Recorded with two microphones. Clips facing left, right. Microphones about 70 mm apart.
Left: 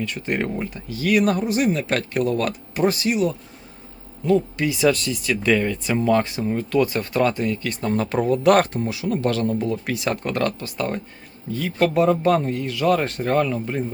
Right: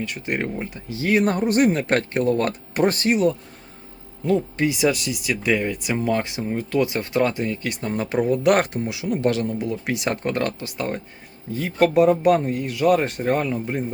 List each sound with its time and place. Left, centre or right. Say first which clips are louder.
0.1 s speech: left 1 dB; centre
0.9 s speech: left 1 dB; right
1.4 s speech: right 2 dB; right
1.8 s speech: right 1 dB; right
2.7 s speech: right 1 dB; right
4.3 s speech: left 1 dB; right
7.9 s speech: left 4 dB; centre
8.1 s speech: left 1 dB; centre
11.5 s speech: right 2 dB; right